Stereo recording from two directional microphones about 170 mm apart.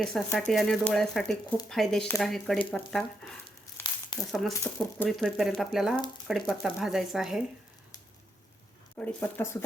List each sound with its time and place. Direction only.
0.3 s speech: centre (ahead or behind)
3.8 s crumpling: 30° left (ahead or behind)
4.3 s speech: centre (ahead or behind)
9.0 s speech: 10° left (ahead or behind)